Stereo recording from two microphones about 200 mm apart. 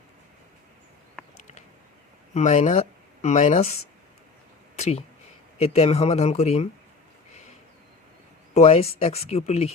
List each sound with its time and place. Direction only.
2.3 s speech: 35° left (ahead or behind)
4.8 s speech: 30° left (ahead or behind)
8.5 s speech: 30° left (ahead or behind)